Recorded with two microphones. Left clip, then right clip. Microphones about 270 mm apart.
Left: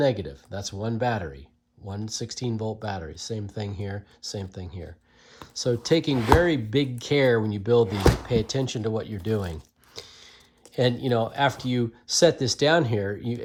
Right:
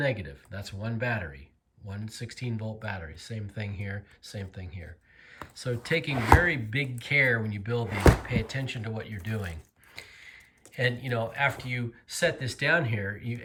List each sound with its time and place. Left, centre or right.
0.0 s speech: centre
6.1 s speech: centre
6.4 s speech: centre
9.0 s gasp: centre
10.8 s speech: centre